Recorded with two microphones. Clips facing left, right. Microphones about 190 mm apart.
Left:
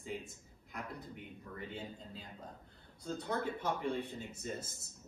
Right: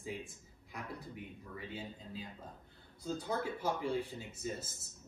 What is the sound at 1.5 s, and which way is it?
Speech, 5° right (ahead or behind).